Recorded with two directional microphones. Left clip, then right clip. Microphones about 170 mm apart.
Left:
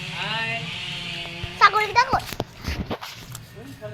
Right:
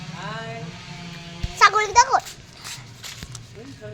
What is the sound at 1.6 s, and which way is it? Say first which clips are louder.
Speech: right 2 dB; 10° right (ahead or behind).